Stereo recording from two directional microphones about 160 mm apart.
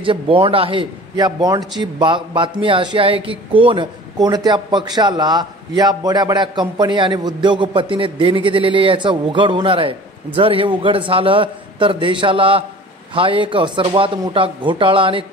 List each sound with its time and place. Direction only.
0.0 s a man's voice: 35° right (ahead or behind)